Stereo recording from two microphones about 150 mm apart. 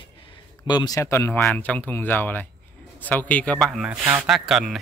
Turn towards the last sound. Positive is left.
turn(degrees=0)  # may be behind; listen again after turning